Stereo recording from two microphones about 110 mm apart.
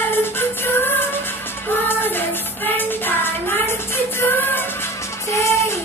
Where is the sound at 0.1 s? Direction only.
20° left (ahead or behind).